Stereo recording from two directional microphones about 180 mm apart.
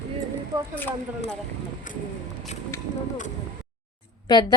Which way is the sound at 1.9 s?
45° left (ahead or behind).